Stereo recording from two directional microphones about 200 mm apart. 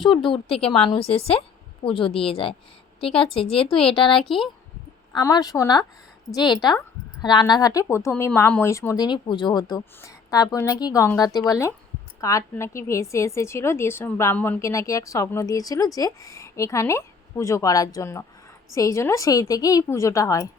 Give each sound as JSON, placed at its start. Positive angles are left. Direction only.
{"t": 0.1, "sound": "a woman's voice", "side_deg": 25}
{"t": 3.2, "sound": "speech", "side_deg": 5}
{"t": 5.1, "sound": "a woman's voice", "side_deg": 20}